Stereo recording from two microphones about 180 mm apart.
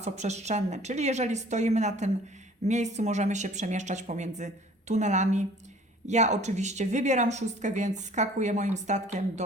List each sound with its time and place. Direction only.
0.0 s a woman's voice: 40° right (ahead or behind)